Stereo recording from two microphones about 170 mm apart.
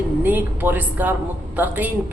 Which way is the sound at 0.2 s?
10° right (ahead or behind).